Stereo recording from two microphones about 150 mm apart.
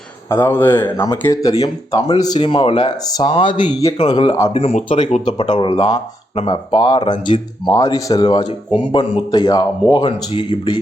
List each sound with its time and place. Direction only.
0.3 s speech: 15° left (ahead or behind)
4.5 s speech: 40° left (ahead or behind)
5.6 s speech: 30° left (ahead or behind)